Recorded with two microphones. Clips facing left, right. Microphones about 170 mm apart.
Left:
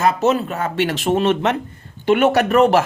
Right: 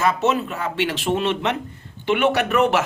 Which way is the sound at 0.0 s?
40° left (ahead or behind).